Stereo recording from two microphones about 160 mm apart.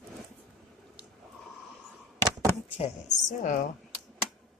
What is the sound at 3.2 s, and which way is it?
Speech, 55° left (ahead or behind).